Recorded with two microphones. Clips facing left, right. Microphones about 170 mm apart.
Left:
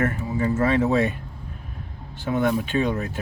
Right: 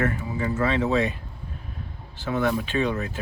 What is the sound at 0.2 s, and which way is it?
Speech, 40° left (ahead or behind).